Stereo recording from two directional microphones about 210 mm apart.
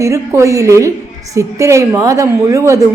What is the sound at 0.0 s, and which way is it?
A woman's voice, 15° right (ahead or behind).